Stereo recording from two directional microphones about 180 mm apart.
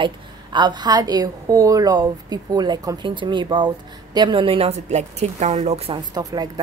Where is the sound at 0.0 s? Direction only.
25° right (ahead or behind).